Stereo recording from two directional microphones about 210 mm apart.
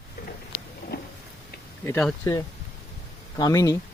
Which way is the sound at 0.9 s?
50° left (ahead or behind).